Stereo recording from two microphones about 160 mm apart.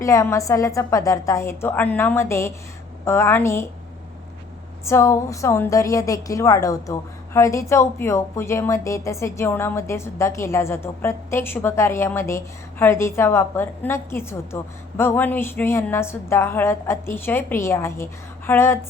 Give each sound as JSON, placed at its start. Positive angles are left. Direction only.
{"t": 0.0, "sound": "a woman's voice", "side_deg": 20}
{"t": 4.9, "sound": "a woman's voice", "side_deg": 15}